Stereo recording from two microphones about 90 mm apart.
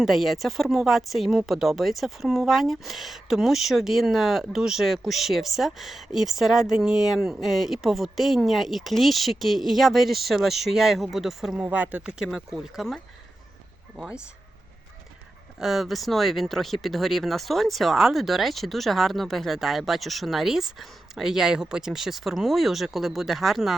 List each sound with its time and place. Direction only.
0.0 s speech: centre (ahead or behind)
11.5 s speech: 15° right (ahead or behind)
12.2 s speech: centre (ahead or behind)
15.5 s speech: 5° right (ahead or behind)